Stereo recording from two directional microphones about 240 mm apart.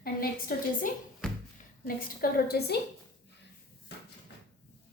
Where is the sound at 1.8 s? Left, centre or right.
Left.